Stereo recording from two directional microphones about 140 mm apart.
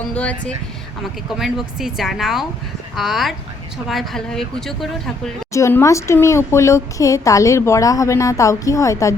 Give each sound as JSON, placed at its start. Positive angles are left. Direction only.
{"t": 0.1, "sound": "speech", "side_deg": 10}
{"t": 1.4, "sound": "speech", "side_deg": -5}
{"t": 5.5, "sound": "speech", "side_deg": 20}